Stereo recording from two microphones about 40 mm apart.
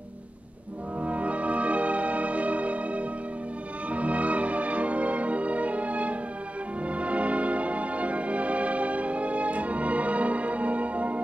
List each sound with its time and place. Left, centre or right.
1.0 s music: right